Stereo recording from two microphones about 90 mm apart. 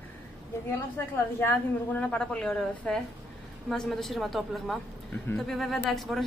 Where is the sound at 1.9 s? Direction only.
10° left (ahead or behind).